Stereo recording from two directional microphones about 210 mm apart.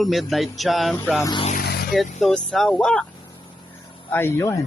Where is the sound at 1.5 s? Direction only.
45° left (ahead or behind).